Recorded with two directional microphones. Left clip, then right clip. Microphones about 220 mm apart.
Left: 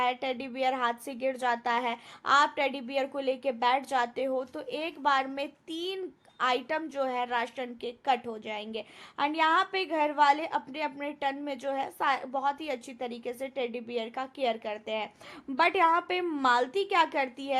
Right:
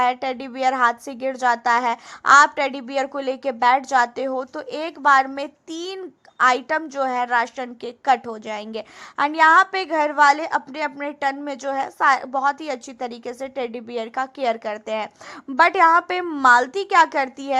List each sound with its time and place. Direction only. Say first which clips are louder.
0.0 s a woman's voice: right 9 dB; 20° right (ahead or behind)